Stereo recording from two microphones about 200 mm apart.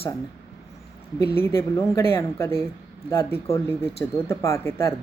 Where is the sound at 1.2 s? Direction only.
10° left (ahead or behind).